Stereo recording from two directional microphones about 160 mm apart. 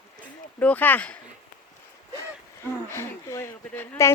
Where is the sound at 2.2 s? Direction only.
15° left (ahead or behind).